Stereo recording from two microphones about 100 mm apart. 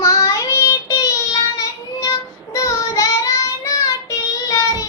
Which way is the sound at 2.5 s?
35° left (ahead or behind).